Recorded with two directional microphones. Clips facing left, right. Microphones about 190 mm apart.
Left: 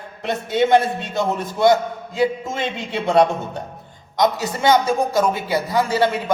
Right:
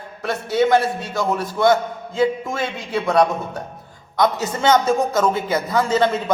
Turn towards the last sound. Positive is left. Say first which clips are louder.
# right 1 dB
turn(degrees=10)  # may be behind; listen again after turning